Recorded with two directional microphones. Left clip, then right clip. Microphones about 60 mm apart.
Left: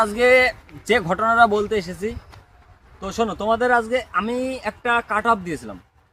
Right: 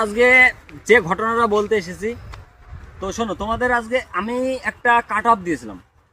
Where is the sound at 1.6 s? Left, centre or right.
Left.